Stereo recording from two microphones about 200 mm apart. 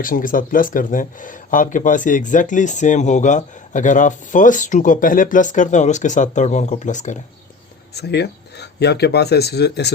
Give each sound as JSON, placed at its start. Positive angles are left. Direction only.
{"t": 0.0, "sound": "speech", "side_deg": 45}
{"t": 7.9, "sound": "speech", "side_deg": 55}